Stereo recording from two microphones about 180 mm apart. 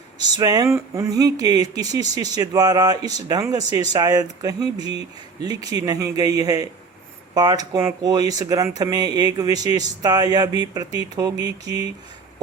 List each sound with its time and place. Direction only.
0.3 s speech: 20° right (ahead or behind)